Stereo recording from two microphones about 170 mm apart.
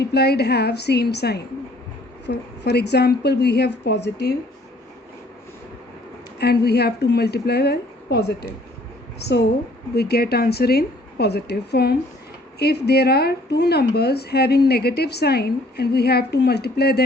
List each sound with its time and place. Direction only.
0.0 s a woman's voice: 75° left (ahead or behind)
6.4 s a woman's voice: 70° left (ahead or behind)
9.9 s speech: 70° left (ahead or behind)